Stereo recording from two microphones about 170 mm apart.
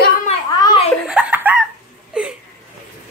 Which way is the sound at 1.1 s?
10° right (ahead or behind).